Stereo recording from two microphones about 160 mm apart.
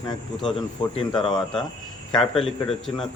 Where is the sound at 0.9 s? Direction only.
35° left (ahead or behind).